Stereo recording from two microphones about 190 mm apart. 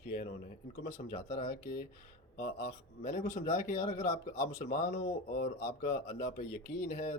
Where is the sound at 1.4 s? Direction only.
40° left (ahead or behind).